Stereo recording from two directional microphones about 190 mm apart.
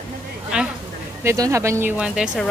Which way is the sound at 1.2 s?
15° right (ahead or behind).